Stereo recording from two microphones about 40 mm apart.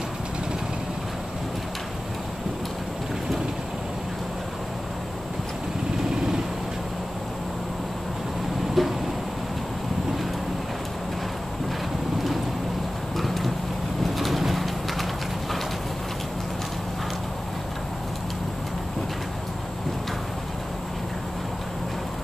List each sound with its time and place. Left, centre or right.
8.8 s a sound: centre
13.1 s clip-clop: centre
14.0 s pigeon: centre